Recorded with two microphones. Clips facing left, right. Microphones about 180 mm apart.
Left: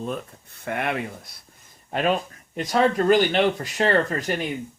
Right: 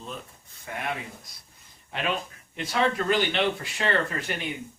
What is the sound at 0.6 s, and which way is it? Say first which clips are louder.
Speech: left 7 dB; 65° left (ahead or behind).